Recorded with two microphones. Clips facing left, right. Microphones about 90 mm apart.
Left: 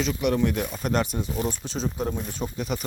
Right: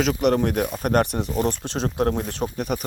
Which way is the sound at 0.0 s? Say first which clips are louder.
Right 4 dB; 55° right (ahead or behind).